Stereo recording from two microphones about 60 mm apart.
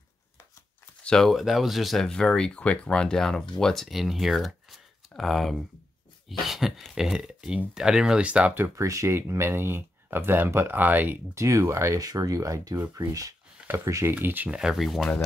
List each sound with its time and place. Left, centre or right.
1.0 s speech: centre
1.4 s a sound: centre
2.0 s speech: centre
6.2 s a sound: centre
7.0 s speech: centre
8.7 s speech: right
11.3 s speech: right
12.0 s speech: right
14.1 s speech: right
14.5 s speech: centre
14.8 s a sound: centre